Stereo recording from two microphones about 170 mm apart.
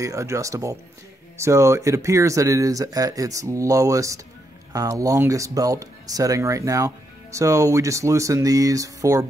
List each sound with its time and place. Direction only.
0.0 s speech: 20° right (ahead or behind)